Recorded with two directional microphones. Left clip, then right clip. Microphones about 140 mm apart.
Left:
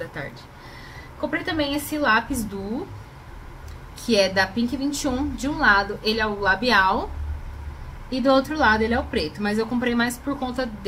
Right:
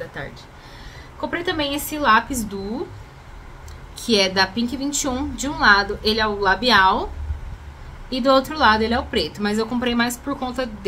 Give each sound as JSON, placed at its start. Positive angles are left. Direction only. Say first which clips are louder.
{"t": 0.2, "sound": "a woman's voice", "louder": "right 1 dB", "side_deg": 0}
{"t": 4.0, "sound": "a woman's voice", "louder": "right 2 dB", "side_deg": -15}
{"t": 8.1, "sound": "a woman's voice", "louder": "right 2 dB", "side_deg": -15}